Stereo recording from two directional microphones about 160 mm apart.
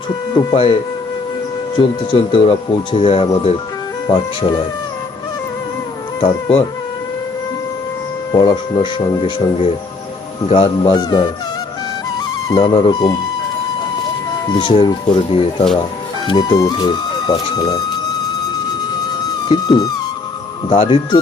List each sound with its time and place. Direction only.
0.3 s speech: 35° left (ahead or behind)
1.8 s speech: 30° left (ahead or behind)
4.0 s speech: 25° left (ahead or behind)
8.3 s speech: 25° left (ahead or behind)
12.5 s speech: 25° left (ahead or behind)
14.6 s speech: 30° left (ahead or behind)
19.5 s speech: 25° left (ahead or behind)
20.7 s speech: 35° left (ahead or behind)